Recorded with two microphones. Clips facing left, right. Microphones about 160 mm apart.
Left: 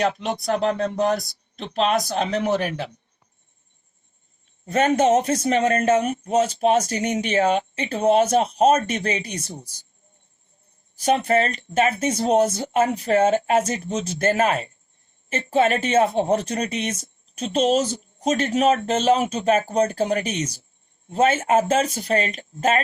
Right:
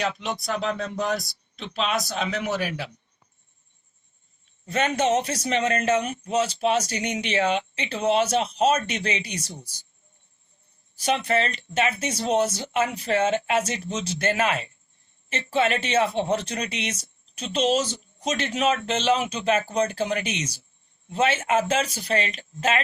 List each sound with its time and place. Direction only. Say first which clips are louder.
0.0 s speech: left 5 dB; 50° left (ahead or behind)
4.6 s speech: left 5 dB; 45° left (ahead or behind)
11.0 s speech: left 4 dB; 40° left (ahead or behind)
17.8 s a sound: left 6 dB; 35° left (ahead or behind)
18.3 s speech: left 5 dB; 45° left (ahead or behind)